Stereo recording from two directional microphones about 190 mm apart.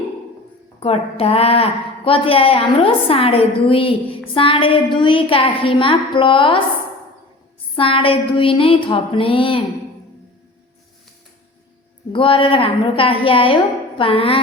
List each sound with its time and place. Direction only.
0.8 s a woman's voice: 30° left (ahead or behind)
7.8 s a woman's voice: 30° left (ahead or behind)
12.1 s a woman's voice: 25° left (ahead or behind)